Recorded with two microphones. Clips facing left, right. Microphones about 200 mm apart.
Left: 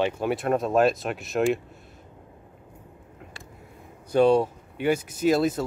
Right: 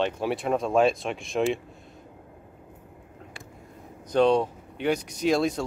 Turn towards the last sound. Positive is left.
turn(degrees=5)  # may be behind; listen again after turning